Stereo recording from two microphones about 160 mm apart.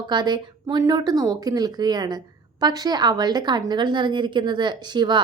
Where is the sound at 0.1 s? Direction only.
30° right (ahead or behind).